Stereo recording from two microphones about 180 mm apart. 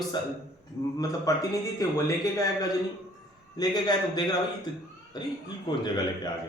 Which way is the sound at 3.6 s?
20° left (ahead or behind).